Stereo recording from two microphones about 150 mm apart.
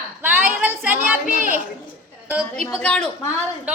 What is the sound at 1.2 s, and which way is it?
Speech, 65° right (ahead or behind).